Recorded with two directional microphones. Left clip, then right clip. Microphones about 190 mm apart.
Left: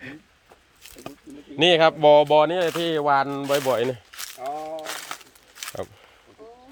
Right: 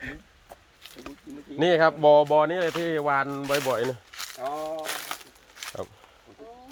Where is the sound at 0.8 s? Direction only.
20° left (ahead or behind).